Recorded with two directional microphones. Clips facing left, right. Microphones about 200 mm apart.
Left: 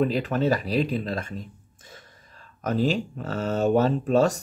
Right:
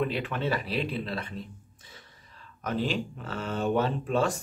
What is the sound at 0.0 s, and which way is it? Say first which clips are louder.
Speech: left 6 dB; 40° left (ahead or behind).